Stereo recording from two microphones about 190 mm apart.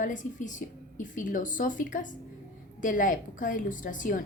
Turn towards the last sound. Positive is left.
turn(degrees=45)  # may be behind; listen again after turning